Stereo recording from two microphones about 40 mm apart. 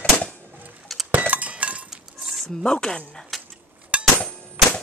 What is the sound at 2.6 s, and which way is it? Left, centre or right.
Speech, left.